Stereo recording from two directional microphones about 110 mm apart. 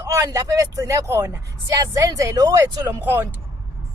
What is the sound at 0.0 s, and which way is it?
Speech, 30° right (ahead or behind).